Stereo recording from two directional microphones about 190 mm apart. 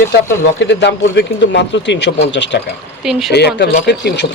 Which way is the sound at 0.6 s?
65° left (ahead or behind).